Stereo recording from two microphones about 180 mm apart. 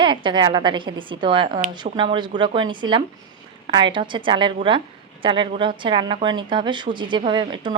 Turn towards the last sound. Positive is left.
turn(degrees=-25)  # may be behind; listen again after turning